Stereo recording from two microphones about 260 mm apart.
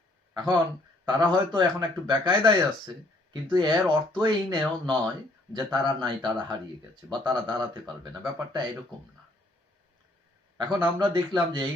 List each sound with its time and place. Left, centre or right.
1.0 s speech: centre
10.6 s speech: centre